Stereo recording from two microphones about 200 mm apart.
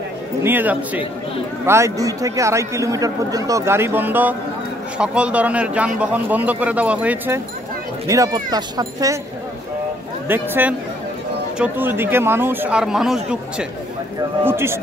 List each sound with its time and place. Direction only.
0.4 s speech: 10° right (ahead or behind)
10.2 s speech: 10° right (ahead or behind)